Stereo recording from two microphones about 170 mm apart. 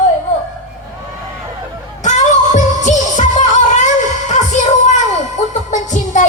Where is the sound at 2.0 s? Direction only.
45° left (ahead or behind).